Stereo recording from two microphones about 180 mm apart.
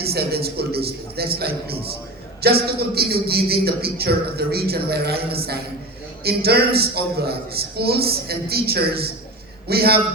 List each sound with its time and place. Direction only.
0.0 s a man's voice: 60° right (ahead or behind)